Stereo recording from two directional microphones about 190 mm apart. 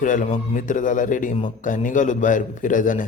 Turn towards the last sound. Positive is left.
turn(degrees=45)  # may be behind; listen again after turning